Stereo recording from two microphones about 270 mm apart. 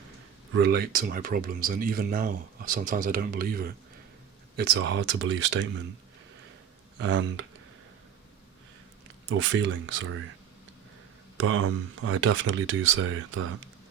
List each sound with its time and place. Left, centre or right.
0.5 s speech: right
7.0 s speech: right
9.3 s speech: right
11.3 s speech: right